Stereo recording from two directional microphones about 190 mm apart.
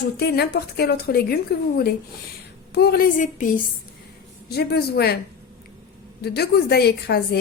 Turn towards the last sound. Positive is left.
turn(degrees=55)  # may be behind; listen again after turning